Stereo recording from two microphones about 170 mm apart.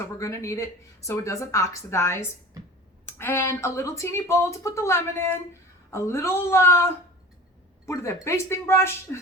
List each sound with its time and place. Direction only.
0.2 s speech: 20° left (ahead or behind)